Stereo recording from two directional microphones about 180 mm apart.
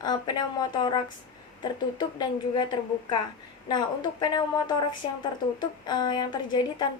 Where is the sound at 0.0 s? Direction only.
25° left (ahead or behind).